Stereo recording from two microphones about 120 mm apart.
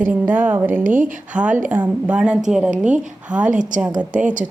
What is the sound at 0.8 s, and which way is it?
Speech, 90° right.